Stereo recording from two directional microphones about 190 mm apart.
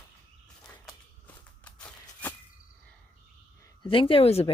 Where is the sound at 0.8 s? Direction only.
5° left (ahead or behind).